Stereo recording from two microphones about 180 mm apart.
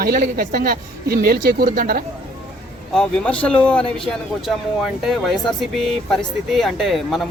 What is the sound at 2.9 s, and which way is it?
Speech, 5° left (ahead or behind).